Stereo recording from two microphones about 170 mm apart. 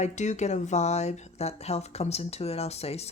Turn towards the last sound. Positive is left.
turn(degrees=35)  # may be behind; listen again after turning